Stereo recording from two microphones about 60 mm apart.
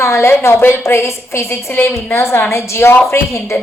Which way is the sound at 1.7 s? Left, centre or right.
Left.